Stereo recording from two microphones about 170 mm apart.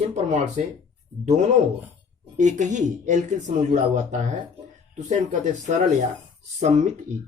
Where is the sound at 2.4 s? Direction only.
45° right (ahead or behind).